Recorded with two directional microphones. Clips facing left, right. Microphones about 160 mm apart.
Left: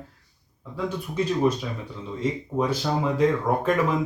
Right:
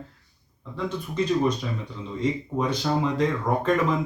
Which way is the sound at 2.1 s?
5° left (ahead or behind).